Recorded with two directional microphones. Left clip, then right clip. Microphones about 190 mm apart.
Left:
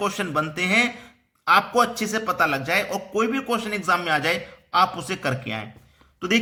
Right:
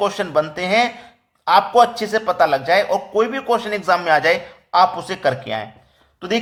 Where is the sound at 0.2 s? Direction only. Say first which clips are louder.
Right 5 dB; 15° left (ahead or behind).